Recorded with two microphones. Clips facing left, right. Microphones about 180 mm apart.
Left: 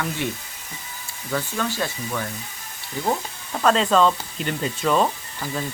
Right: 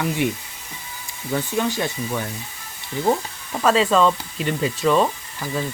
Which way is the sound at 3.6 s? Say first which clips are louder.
Right 1 dB; 5° right (ahead or behind).